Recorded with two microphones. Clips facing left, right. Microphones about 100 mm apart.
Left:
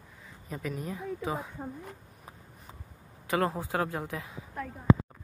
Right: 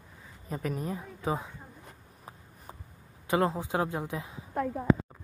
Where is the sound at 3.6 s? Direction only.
20° right (ahead or behind).